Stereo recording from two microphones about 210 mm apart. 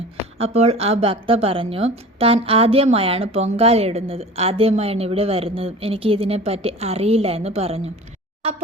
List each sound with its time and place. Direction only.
0.3 s speech: 30° right (ahead or behind)